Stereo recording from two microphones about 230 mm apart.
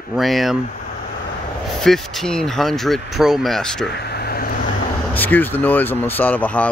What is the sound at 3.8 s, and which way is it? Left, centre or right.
Vehicle, left.